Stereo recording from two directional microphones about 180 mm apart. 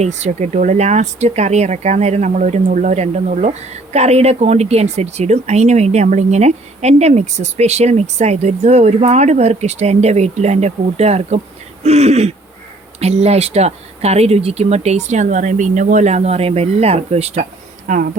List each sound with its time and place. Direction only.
0.0 s speech: 40° right (ahead or behind)